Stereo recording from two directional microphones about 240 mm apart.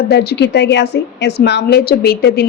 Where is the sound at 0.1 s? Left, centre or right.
Left.